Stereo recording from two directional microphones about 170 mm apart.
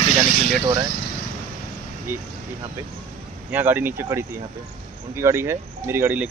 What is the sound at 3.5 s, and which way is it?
Speech, 10° right (ahead or behind).